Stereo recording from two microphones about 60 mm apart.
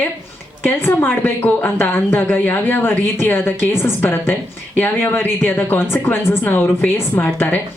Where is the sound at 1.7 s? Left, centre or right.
Left.